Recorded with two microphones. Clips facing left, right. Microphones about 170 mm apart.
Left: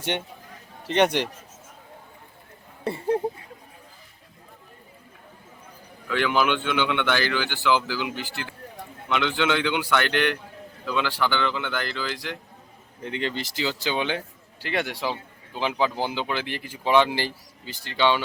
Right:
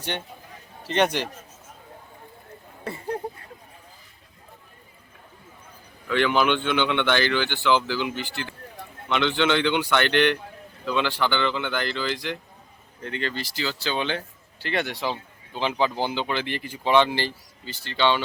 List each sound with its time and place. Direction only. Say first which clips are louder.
0.9 s speech: left 2 dB; 15° left (ahead or behind)
2.8 s a sound: left 6 dB; 25° left (ahead or behind)
6.1 s speech: right 2 dB; 5° left (ahead or behind)
13.0 s speech: left 1 dB; 15° left (ahead or behind)